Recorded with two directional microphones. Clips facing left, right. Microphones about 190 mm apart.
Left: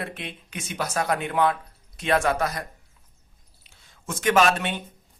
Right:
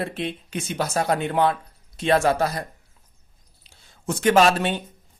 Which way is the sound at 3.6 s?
30° right (ahead or behind).